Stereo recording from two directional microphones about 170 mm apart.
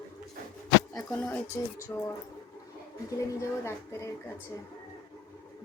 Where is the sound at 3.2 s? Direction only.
20° left (ahead or behind).